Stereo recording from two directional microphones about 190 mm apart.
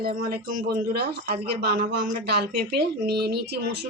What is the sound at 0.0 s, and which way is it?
A woman's voice, 50° right (ahead or behind).